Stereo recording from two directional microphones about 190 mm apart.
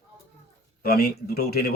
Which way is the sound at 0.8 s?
55° left (ahead or behind).